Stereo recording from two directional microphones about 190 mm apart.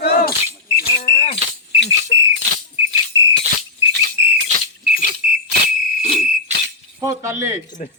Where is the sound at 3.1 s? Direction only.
70° right (ahead or behind).